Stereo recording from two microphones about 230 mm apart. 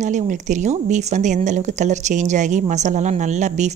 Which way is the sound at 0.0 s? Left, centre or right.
Right.